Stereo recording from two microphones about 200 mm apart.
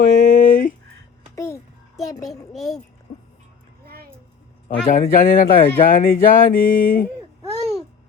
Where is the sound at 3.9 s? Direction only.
50° right (ahead or behind).